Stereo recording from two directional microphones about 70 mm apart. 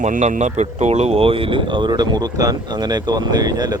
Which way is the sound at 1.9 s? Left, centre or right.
Right.